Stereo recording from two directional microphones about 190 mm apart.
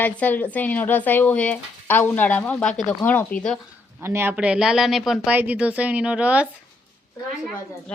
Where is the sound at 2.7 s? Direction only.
40° left (ahead or behind).